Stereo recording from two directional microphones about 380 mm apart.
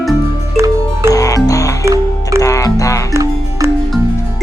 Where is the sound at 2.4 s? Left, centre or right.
Centre.